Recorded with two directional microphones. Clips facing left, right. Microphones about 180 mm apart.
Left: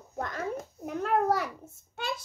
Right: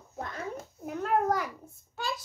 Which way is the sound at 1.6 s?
25° left (ahead or behind).